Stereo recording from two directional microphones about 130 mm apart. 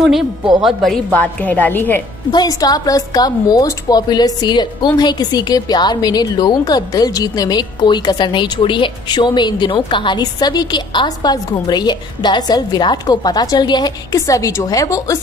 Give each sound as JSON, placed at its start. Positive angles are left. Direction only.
{"t": 0.6, "sound": "speech", "side_deg": 0}
{"t": 1.1, "sound": "a woman's voice", "side_deg": 10}
{"t": 2.3, "sound": "a woman's voice", "side_deg": 30}